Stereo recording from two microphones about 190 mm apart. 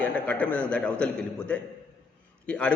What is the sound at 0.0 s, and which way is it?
A man's voice, 10° left (ahead or behind).